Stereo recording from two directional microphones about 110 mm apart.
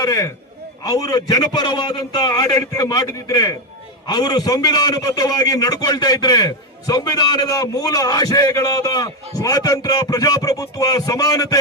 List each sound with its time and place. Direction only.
0.0 s a man's voice: 35° left (ahead or behind)